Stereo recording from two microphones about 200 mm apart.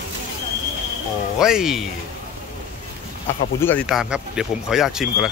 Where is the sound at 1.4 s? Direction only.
5° right (ahead or behind).